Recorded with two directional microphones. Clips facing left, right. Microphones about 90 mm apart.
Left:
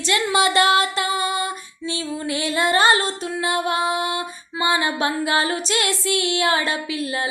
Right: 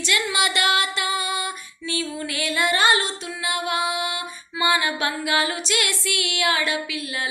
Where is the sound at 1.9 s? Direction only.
25° left (ahead or behind).